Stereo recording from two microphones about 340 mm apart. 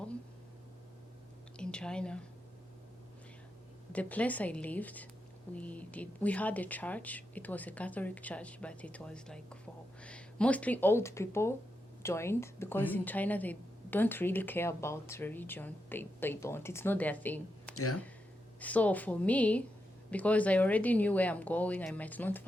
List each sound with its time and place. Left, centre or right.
1.5 s a woman's voice: centre
3.9 s speech: centre
17.7 s speech: left
18.6 s speech: centre